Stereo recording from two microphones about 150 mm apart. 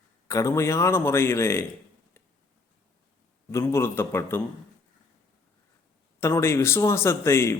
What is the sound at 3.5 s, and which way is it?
Speech, 15° left (ahead or behind).